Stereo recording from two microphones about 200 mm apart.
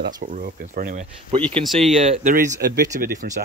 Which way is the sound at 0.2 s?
45° right (ahead or behind).